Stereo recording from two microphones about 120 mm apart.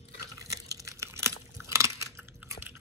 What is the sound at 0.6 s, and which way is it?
Chewing, 25° right (ahead or behind).